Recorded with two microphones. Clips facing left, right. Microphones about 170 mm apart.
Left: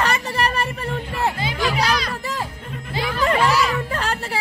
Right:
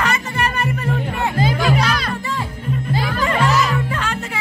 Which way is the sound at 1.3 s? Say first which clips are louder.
Right 6 dB; 45° right (ahead or behind).